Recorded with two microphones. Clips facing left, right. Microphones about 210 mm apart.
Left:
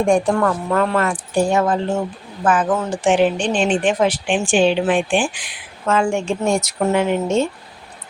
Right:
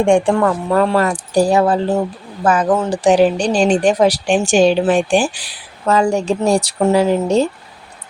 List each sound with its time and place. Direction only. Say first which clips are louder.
0.0 s speech: right 3 dB; 30° right (ahead or behind)